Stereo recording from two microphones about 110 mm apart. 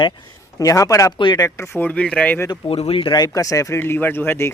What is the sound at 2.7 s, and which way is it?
Speech, 65° left (ahead or behind).